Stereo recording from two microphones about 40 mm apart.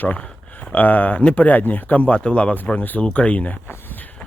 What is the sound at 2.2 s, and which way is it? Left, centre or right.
Speech, left.